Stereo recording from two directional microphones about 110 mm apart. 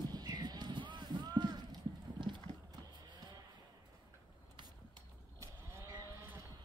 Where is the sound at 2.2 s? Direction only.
45° right (ahead or behind).